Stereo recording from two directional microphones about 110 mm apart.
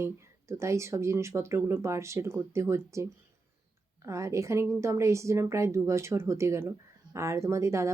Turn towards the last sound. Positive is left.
turn(degrees=-25)  # may be behind; listen again after turning